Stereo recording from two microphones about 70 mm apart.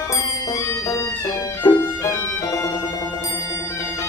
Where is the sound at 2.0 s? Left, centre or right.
Left.